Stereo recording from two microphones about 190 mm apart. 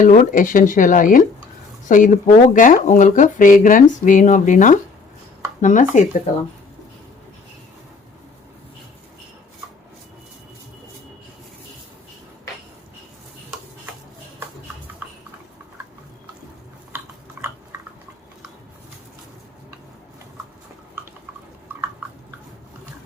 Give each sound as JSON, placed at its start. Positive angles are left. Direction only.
{"t": 0.0, "sound": "speech", "side_deg": 40}
{"t": 17.4, "sound": "chewing", "side_deg": -10}
{"t": 21.7, "sound": "a sound", "side_deg": -10}